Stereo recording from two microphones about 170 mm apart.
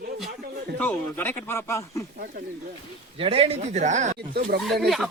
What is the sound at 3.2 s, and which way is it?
Speech, 35° right (ahead or behind).